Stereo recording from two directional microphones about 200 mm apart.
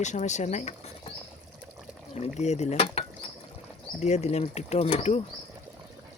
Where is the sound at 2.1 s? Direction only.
35° left (ahead or behind).